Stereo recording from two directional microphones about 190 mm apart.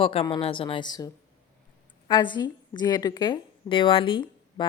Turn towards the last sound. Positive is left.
turn(degrees=25)  # may be behind; listen again after turning